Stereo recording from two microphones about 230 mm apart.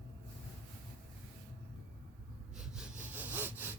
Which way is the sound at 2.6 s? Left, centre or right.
Centre.